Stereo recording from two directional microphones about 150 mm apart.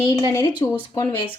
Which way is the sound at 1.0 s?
35° left (ahead or behind).